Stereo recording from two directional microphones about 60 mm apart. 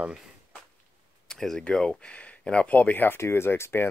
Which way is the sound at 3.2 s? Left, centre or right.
Left.